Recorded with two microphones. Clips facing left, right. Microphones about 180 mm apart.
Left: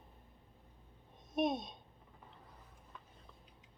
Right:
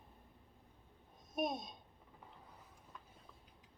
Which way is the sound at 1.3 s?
Centre (ahead or behind).